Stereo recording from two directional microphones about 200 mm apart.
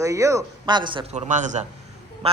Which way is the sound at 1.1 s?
35° right (ahead or behind).